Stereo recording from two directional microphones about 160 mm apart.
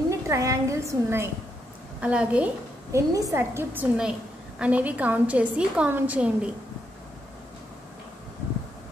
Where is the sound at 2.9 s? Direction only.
20° right (ahead or behind).